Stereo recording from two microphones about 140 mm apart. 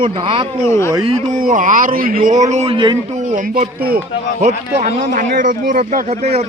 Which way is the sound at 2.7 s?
35° right (ahead or behind).